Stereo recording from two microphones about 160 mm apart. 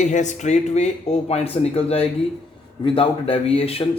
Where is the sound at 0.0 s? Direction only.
50° left (ahead or behind).